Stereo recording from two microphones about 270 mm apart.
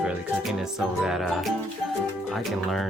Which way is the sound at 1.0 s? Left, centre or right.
Centre.